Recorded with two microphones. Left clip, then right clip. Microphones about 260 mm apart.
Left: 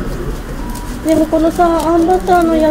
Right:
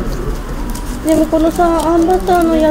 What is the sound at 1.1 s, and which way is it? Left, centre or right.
Speech, centre.